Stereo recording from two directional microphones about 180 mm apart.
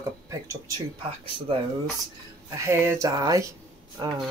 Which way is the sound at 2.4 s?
15° right (ahead or behind).